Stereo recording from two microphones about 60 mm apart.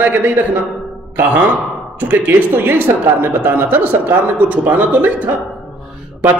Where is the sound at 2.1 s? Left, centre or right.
Right.